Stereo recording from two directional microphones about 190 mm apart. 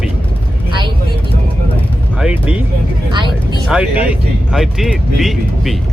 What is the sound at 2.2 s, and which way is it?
Speech, 5° right (ahead or behind).